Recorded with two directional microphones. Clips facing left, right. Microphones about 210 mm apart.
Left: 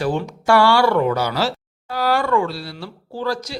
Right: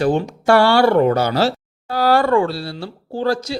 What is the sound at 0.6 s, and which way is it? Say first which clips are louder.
Speech: right 3 dB; 25° right (ahead or behind).